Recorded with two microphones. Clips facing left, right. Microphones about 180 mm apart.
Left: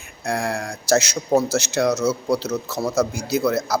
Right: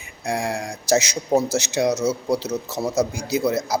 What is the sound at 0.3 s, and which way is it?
A man's voice, 15° right (ahead or behind).